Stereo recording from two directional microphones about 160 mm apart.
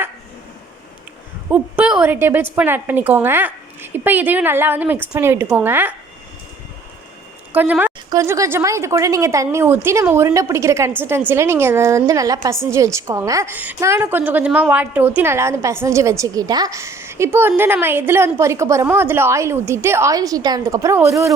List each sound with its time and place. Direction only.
1.5 s a woman's voice: 10° right (ahead or behind)
7.5 s a woman's voice: 10° right (ahead or behind)